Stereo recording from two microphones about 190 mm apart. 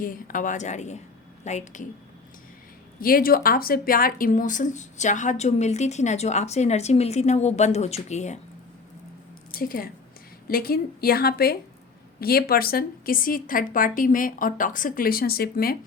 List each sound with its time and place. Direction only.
0.0 s speech: 45° left (ahead or behind)
3.0 s speech: 50° left (ahead or behind)
9.5 s a woman's voice: 50° left (ahead or behind)